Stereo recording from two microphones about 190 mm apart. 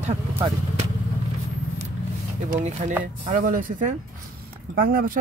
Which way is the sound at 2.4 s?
40° right (ahead or behind).